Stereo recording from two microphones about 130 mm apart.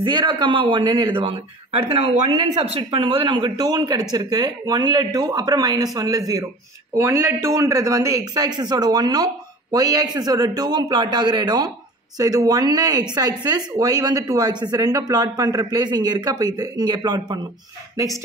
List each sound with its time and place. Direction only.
0.0 s speech: 35° right (ahead or behind)